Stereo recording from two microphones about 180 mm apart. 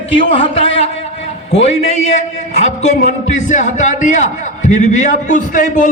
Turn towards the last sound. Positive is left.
turn(degrees=45)  # may be behind; listen again after turning